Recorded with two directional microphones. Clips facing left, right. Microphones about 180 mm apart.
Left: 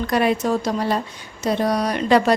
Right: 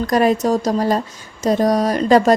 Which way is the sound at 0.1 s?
40° right (ahead or behind).